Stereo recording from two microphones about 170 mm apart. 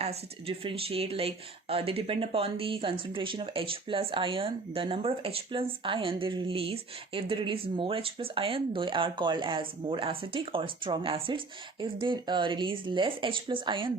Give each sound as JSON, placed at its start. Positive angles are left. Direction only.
{"t": 0.0, "sound": "speech", "side_deg": -35}